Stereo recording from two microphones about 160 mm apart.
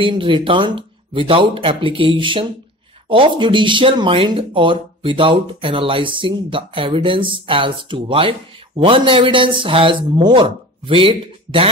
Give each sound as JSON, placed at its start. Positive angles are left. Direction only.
{"t": 0.0, "sound": "speech", "side_deg": -30}